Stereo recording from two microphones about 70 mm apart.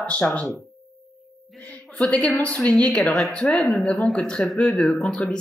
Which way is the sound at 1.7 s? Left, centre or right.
Centre.